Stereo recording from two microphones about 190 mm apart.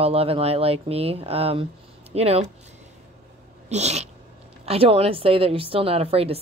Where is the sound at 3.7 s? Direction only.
35° right (ahead or behind).